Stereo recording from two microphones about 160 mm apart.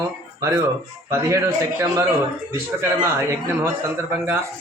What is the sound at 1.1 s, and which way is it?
Speech, 15° right (ahead or behind).